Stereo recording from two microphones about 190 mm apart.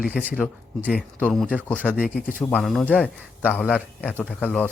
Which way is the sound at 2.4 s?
5° left (ahead or behind).